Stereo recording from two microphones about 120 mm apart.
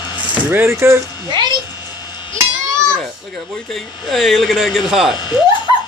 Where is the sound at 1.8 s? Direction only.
40° left (ahead or behind).